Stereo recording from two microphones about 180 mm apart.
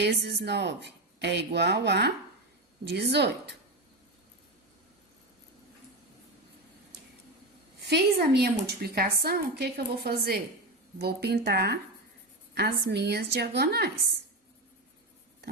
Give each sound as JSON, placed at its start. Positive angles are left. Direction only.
{"t": 0.0, "sound": "a woman's voice", "side_deg": -65}
{"t": 7.9, "sound": "a woman's voice", "side_deg": -65}